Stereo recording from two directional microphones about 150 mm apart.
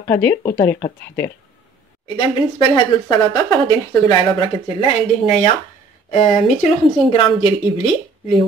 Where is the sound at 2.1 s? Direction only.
30° left (ahead or behind).